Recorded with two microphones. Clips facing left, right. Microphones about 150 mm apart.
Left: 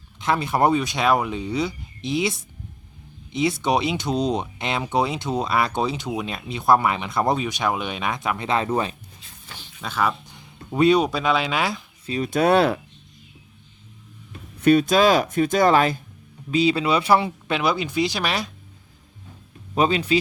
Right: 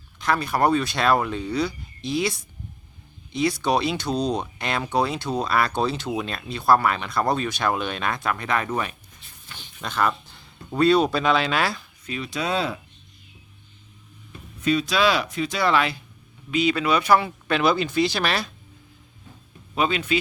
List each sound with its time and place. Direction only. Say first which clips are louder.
0.2 s speech: left 1 dB; 25° left (ahead or behind)
9.6 s speech: even; 5° left (ahead or behind)
10.2 s speech: left 2 dB; 15° left (ahead or behind)
12.0 s a man's voice: left 6 dB; 35° left (ahead or behind)
12.3 s speech: left 9 dB; 55° left (ahead or behind)
14.6 s speech: left 5 dB; 55° left (ahead or behind)
16.5 s speech: left 2 dB; 30° left (ahead or behind)
17.6 s speech: right 2 dB; 10° left (ahead or behind)
19.7 s a man's voice: left 3 dB; 35° left (ahead or behind)